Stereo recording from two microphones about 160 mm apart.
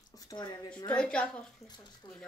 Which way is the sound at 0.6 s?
10° left (ahead or behind).